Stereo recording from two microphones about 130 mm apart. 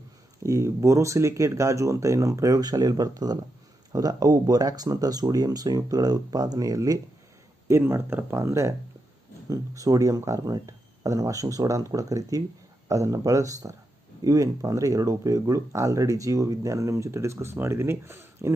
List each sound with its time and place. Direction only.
0.4 s speech: 25° right (ahead or behind)